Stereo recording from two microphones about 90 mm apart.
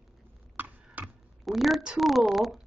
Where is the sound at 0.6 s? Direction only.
20° right (ahead or behind).